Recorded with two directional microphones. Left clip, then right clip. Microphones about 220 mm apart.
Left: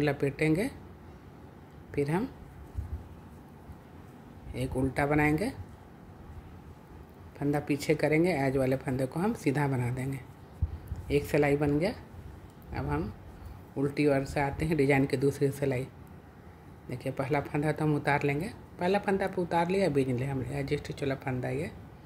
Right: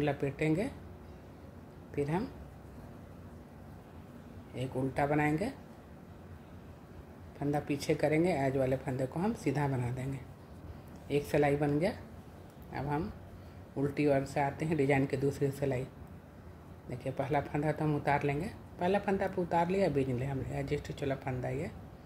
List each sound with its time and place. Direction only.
0.0 s speech: 20° left (ahead or behind)
1.9 s speech: 20° left (ahead or behind)
4.6 s speech: 15° left (ahead or behind)
7.3 s speech: 20° left (ahead or behind)
16.9 s speech: 15° left (ahead or behind)